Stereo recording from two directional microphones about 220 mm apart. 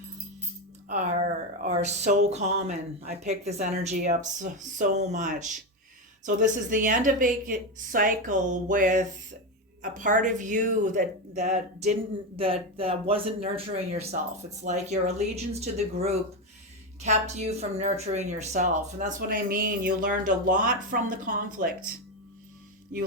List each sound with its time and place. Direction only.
0.9 s a woman's voice: 35° right (ahead or behind)